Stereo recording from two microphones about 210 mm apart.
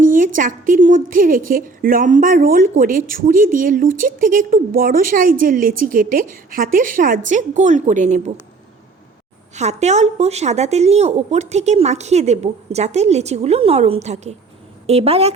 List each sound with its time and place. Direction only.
0.0 s a sound: 40° right (ahead or behind)
0.3 s a woman's voice: 40° right (ahead or behind)
9.6 s a woman's voice: 35° right (ahead or behind)